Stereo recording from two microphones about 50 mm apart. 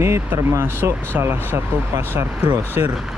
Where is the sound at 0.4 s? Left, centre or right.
Right.